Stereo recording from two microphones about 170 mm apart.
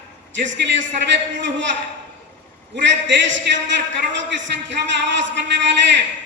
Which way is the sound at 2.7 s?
90° right.